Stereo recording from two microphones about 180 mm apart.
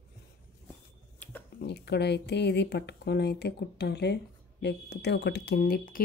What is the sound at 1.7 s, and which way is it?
Speech, 65° left (ahead or behind).